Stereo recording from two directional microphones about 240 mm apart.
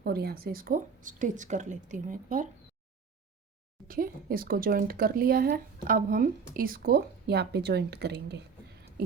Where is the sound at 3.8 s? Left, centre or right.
Right.